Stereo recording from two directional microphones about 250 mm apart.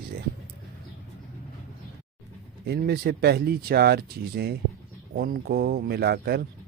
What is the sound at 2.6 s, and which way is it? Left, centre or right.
Speech, right.